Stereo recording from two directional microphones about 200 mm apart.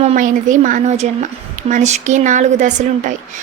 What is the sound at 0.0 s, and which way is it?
Speech, 35° right (ahead or behind).